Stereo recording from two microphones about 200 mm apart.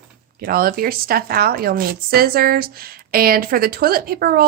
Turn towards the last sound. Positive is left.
turn(degrees=-50)  # may be behind; listen again after turning